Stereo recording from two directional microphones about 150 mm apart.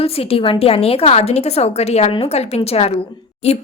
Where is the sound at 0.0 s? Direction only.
40° left (ahead or behind).